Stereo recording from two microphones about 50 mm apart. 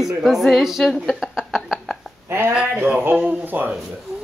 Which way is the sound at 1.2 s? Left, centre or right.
Centre.